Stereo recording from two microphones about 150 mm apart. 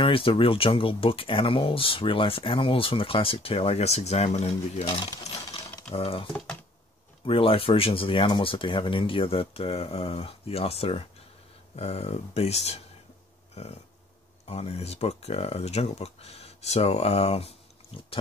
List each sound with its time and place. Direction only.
0.0 s speech: 35° left (ahead or behind)
4.8 s speech: 35° left (ahead or behind)
6.3 s speech: 5° left (ahead or behind)
7.2 s speech: 35° left (ahead or behind)
14.5 s speech: 40° left (ahead or behind)